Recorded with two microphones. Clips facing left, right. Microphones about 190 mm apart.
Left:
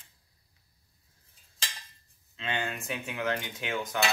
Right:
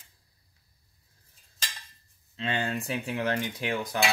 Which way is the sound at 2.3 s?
35° right (ahead or behind).